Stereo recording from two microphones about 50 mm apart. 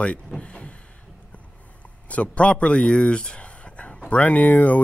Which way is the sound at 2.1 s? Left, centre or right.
Left.